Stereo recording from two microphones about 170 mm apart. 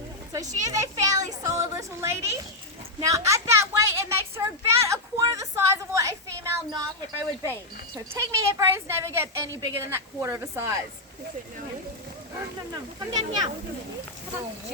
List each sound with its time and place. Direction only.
0.6 s a woman's voice: 20° right (ahead or behind)
13.1 s speech: 25° right (ahead or behind)